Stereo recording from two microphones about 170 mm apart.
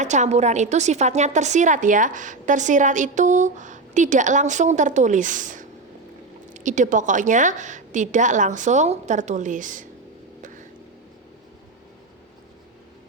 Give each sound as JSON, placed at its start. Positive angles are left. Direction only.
{"t": 0.0, "sound": "a woman's voice", "side_deg": -45}